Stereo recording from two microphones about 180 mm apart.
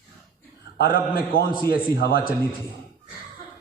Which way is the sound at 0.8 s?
55° left (ahead or behind).